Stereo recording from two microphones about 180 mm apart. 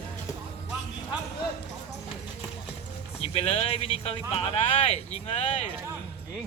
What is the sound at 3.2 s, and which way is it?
Speech, 30° left (ahead or behind).